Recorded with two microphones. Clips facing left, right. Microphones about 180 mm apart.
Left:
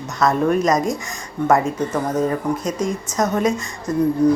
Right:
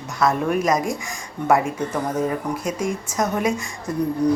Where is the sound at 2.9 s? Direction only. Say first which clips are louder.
Left 2 dB; 10° right (ahead or behind).